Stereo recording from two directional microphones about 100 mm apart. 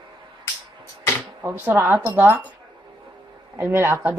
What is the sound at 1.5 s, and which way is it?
A woman's voice, 20° right (ahead or behind).